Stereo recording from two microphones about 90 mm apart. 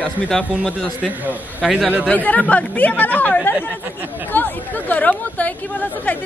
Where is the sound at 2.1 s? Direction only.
15° left (ahead or behind).